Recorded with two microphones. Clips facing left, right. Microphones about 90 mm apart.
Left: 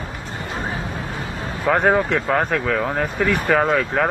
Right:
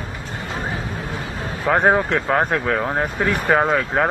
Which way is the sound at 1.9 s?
20° right (ahead or behind).